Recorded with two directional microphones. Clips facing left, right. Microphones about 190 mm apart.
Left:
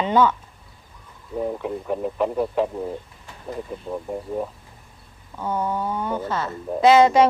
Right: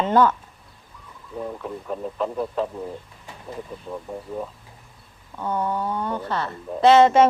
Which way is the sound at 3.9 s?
15° left (ahead or behind).